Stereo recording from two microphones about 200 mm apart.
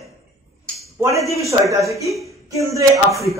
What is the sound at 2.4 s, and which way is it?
Speech, 15° right (ahead or behind).